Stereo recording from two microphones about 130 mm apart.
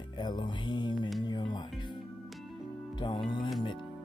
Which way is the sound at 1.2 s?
35° left (ahead or behind).